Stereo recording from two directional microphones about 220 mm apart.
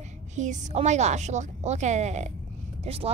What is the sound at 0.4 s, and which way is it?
A woman's voice, 35° right (ahead or behind).